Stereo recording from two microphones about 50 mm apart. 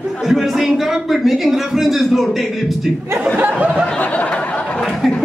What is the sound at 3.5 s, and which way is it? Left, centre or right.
Speech, centre.